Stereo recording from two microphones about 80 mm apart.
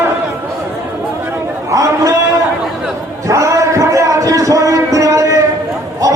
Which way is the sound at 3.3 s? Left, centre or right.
Right.